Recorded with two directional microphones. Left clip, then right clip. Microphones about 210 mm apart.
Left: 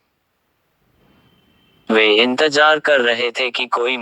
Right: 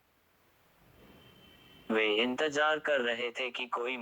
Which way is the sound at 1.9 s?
40° left (ahead or behind).